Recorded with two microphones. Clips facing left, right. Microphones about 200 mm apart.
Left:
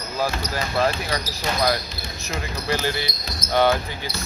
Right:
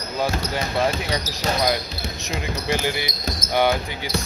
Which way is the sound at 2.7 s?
15° right (ahead or behind).